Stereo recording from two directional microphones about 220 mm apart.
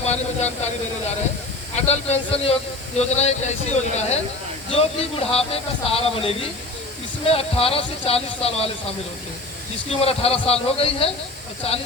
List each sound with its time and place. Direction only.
0.0 s speech: 30° left (ahead or behind)
1.7 s speech: 30° left (ahead or behind)
9.9 s speech: 25° left (ahead or behind)